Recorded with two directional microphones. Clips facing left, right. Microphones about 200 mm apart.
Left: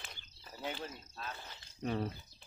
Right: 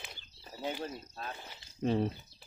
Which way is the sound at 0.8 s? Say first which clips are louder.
Right 5 dB; 40° right (ahead or behind).